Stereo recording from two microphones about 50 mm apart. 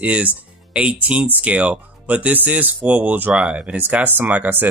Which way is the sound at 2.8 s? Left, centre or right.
Right.